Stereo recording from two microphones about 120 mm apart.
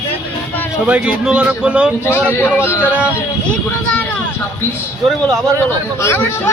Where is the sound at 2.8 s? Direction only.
10° right (ahead or behind).